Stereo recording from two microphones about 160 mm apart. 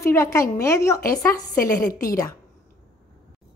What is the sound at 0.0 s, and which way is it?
A woman's voice, 20° left (ahead or behind).